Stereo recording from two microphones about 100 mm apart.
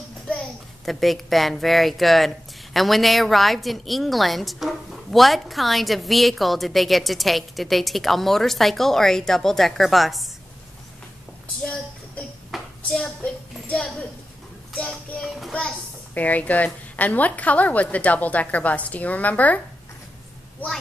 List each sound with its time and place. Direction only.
0.8 s a woman's voice: centre (ahead or behind)
12.4 s a sound: centre (ahead or behind)
14.7 s child singing: 5° left (ahead or behind)
16.2 s a woman's voice: 15° left (ahead or behind)